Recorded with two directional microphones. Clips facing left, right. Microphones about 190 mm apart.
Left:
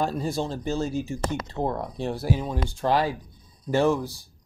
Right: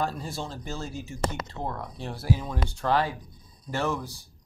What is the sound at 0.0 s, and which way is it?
Speech, 15° left (ahead or behind).